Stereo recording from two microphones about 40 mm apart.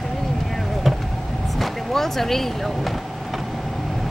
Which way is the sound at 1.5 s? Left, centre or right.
Centre.